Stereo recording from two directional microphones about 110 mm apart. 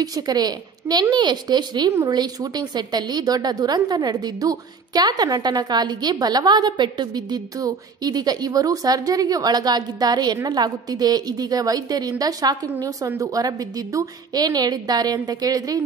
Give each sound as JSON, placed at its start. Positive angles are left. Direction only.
{"t": 0.0, "sound": "a woman's voice", "side_deg": -35}